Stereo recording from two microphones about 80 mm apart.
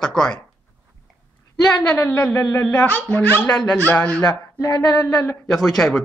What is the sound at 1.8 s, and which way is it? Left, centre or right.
Speech, centre.